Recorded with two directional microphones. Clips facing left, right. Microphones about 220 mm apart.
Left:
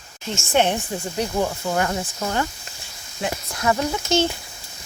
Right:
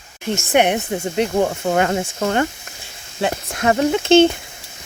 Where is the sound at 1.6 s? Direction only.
75° right (ahead or behind).